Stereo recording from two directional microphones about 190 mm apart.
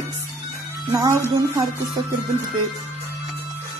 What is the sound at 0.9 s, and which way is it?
Speech, 20° right (ahead or behind).